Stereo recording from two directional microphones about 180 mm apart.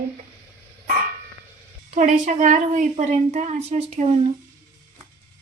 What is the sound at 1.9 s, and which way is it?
A woman's voice, 45° right (ahead or behind).